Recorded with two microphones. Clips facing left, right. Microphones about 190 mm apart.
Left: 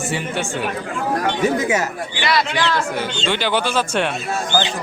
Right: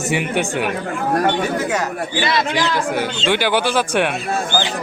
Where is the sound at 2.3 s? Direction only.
20° right (ahead or behind).